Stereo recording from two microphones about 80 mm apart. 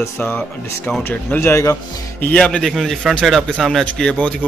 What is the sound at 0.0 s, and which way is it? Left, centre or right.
Speech, left.